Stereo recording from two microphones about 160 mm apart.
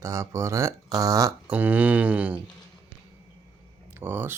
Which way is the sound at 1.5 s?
10° right (ahead or behind).